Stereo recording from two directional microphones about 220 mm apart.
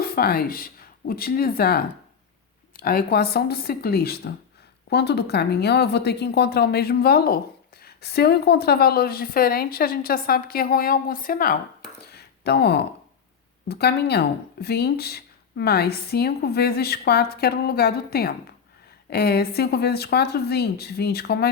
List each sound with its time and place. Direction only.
0.0 s speech: 45° left (ahead or behind)
12.1 s a sound: 50° left (ahead or behind)
13.7 s speech: 45° left (ahead or behind)